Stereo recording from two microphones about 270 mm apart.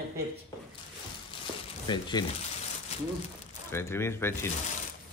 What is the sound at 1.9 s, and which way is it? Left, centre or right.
Speech, centre.